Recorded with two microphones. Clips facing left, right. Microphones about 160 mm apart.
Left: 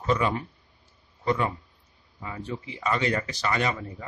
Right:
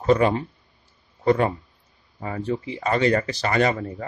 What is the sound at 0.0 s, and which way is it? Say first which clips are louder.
Speech: right 7 dB; 45° right (ahead or behind).